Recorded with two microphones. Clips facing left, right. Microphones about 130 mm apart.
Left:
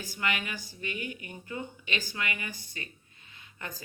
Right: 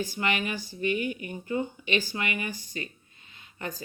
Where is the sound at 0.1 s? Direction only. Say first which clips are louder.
Right 4 dB; 25° right (ahead or behind).